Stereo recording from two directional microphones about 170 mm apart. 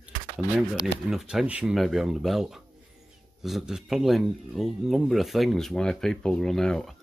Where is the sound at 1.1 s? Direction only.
5° right (ahead or behind).